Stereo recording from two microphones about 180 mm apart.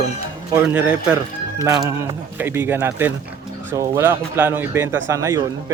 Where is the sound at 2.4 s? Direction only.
10° right (ahead or behind).